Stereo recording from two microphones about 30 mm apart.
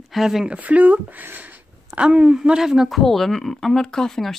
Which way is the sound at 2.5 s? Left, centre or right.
Centre.